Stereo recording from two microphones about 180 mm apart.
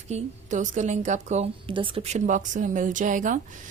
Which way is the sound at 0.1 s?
45° right (ahead or behind).